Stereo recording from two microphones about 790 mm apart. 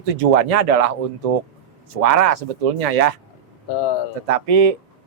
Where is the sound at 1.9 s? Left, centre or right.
Right.